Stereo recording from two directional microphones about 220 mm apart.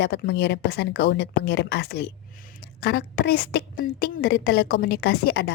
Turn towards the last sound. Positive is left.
turn(degrees=45)  # may be behind; listen again after turning